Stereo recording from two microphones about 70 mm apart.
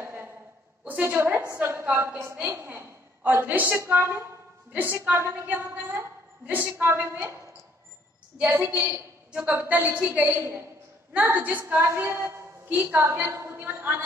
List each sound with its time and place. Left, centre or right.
0.0 s a sound: right
0.8 s a woman's voice: right
1.5 s a woman's voice: right
8.4 s a woman's voice: centre
8.7 s a woman's voice: right
9.3 s a woman's voice: right
11.7 s a woman's voice: right